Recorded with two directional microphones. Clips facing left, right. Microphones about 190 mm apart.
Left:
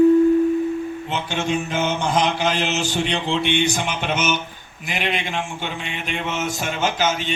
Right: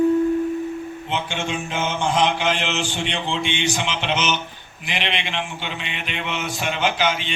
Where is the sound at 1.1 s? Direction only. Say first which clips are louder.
Left 1 dB; 40° left (ahead or behind).